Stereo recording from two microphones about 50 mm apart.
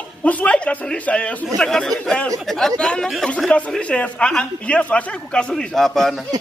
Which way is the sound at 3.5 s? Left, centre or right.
Left.